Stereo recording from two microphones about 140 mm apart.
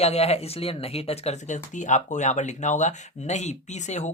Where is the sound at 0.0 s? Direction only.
50° left (ahead or behind).